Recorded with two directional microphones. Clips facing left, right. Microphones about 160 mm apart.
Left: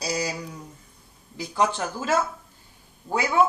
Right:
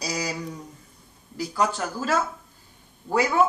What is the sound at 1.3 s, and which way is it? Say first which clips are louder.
Speech: left 1 dB; 25° left (ahead or behind).